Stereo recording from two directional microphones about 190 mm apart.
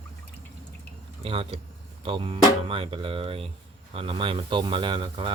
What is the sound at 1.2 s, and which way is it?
Speech, 30° right (ahead or behind).